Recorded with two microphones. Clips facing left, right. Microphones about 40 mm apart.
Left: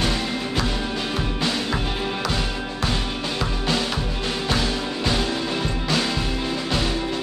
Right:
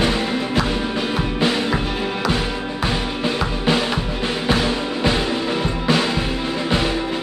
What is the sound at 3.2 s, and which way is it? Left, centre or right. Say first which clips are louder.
Music: right 7 dB; right.